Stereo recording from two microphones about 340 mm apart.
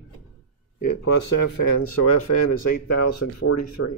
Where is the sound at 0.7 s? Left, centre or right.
Left.